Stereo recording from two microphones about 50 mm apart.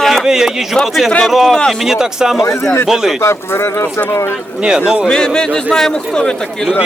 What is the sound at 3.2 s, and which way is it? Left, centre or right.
Speech, left.